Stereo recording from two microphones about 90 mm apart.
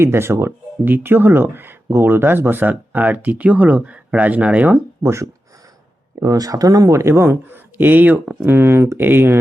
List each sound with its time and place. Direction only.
0.0 s speech: 30° right (ahead or behind)
5.0 s speech: 30° right (ahead or behind); by 8.4 s 15° right (ahead or behind)
8.4 s speech: 25° right (ahead or behind)